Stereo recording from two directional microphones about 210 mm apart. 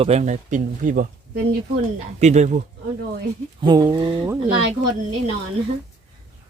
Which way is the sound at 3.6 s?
20° right (ahead or behind).